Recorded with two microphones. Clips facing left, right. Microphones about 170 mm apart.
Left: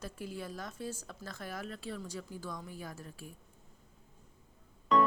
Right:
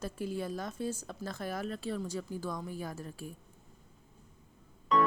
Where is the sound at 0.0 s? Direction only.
25° right (ahead or behind).